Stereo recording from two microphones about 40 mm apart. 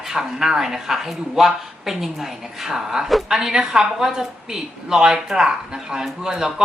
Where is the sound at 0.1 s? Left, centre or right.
Centre.